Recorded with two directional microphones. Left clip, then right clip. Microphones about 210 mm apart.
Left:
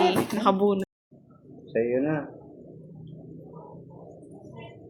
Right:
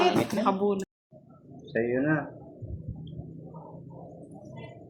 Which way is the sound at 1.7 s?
30° right (ahead or behind).